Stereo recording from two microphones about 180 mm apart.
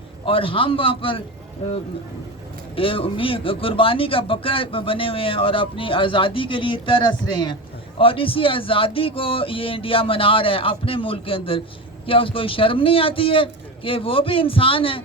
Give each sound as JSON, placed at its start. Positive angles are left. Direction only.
{"t": 0.3, "sound": "speech", "side_deg": 30}